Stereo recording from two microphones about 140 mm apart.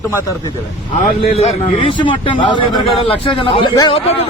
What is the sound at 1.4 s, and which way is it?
A man's voice, 45° left (ahead or behind).